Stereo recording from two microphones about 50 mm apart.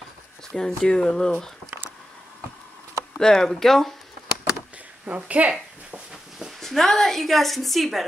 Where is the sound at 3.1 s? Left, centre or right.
Centre.